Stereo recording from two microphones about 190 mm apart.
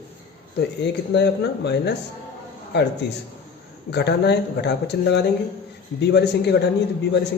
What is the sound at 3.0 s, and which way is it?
Speech, 65° left (ahead or behind).